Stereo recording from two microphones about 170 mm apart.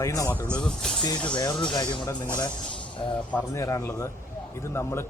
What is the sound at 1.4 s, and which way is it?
Speech, 25° left (ahead or behind).